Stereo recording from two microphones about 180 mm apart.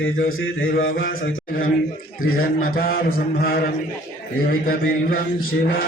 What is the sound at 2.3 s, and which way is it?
Speech, 55° left (ahead or behind).